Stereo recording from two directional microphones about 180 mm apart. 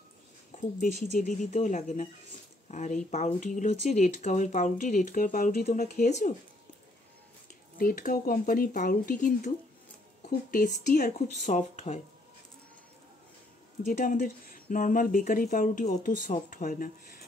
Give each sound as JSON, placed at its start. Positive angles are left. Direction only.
{"t": 0.6, "sound": "speech", "side_deg": 45}
{"t": 7.7, "sound": "speech", "side_deg": 50}
{"t": 10.5, "sound": "speech", "side_deg": 50}
{"t": 13.8, "sound": "speech", "side_deg": 45}